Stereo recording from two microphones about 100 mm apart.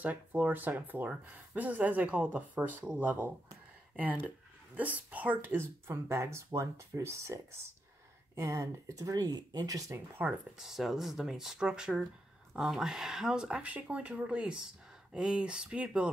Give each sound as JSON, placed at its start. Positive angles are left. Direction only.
{"t": 0.0, "sound": "speech", "side_deg": -15}
{"t": 8.4, "sound": "speech", "side_deg": -30}
{"t": 10.2, "sound": "speech", "side_deg": -15}
{"t": 10.6, "sound": "speech", "side_deg": -5}